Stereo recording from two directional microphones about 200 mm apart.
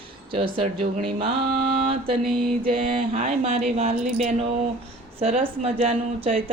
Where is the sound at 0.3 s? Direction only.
25° right (ahead or behind).